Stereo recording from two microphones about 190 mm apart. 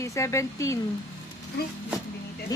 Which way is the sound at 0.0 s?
15° left (ahead or behind).